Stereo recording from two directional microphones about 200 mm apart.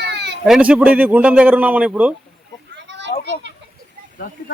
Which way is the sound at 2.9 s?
60° right (ahead or behind).